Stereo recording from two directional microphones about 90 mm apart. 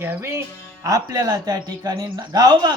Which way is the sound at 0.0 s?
25° right (ahead or behind).